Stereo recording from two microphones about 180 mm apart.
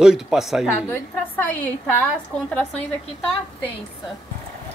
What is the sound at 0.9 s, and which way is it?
Speech, 10° left (ahead or behind).